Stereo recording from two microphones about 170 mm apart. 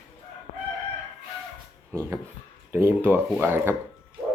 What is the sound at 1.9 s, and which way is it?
Speech, 15° right (ahead or behind).